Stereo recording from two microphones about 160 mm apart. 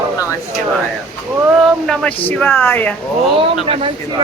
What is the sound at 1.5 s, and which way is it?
Speech, centre (ahead or behind).